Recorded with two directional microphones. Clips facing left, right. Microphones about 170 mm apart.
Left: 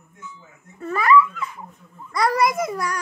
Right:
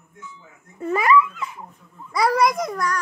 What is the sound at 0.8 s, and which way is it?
Dog, 15° right (ahead or behind).